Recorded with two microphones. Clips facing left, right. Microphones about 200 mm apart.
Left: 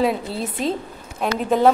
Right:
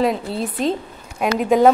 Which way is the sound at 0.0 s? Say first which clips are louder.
Right 1 dB; centre (ahead or behind).